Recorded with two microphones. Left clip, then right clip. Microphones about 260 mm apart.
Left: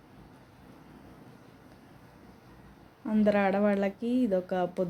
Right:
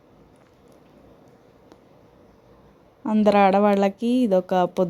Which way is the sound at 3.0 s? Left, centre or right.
Right.